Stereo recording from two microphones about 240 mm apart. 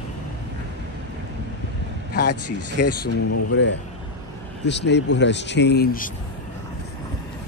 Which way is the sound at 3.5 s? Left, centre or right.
Left.